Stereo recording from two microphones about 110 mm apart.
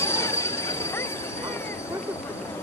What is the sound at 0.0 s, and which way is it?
Train, 25° left (ahead or behind).